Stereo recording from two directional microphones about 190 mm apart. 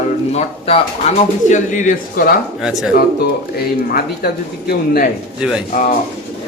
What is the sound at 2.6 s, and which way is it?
Speech, 5° right (ahead or behind).